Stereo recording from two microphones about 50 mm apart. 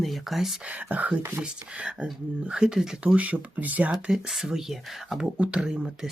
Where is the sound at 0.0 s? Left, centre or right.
Centre.